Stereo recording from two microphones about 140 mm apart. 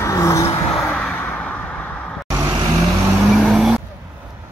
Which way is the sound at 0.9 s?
5° left (ahead or behind).